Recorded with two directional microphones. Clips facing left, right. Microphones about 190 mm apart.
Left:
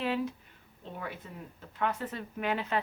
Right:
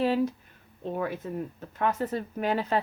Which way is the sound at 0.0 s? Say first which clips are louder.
Right 7 dB; 35° right (ahead or behind).